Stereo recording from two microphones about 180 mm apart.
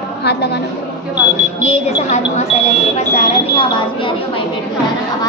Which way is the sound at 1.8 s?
40° left (ahead or behind).